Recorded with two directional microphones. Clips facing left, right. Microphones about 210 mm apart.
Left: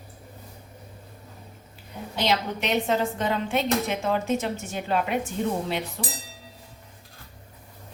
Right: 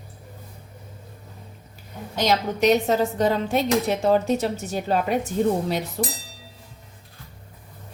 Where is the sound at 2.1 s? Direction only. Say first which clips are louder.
Right 3 dB; 45° right (ahead or behind).